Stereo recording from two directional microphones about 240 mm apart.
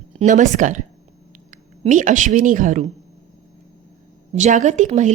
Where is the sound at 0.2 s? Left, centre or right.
Right.